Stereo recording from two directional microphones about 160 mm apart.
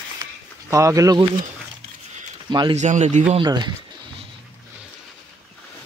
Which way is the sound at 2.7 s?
45° right (ahead or behind).